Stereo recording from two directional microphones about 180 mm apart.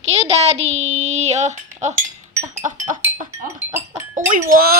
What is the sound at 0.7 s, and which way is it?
Child singing, 40° right (ahead or behind).